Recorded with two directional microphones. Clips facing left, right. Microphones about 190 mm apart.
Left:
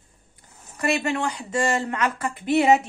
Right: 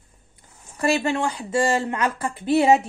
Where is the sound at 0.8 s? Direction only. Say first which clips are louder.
Right 2 dB; 30° right (ahead or behind).